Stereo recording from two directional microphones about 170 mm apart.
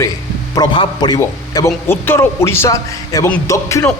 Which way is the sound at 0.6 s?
25° left (ahead or behind).